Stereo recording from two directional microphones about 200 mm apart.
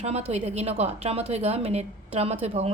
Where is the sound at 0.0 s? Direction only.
35° right (ahead or behind).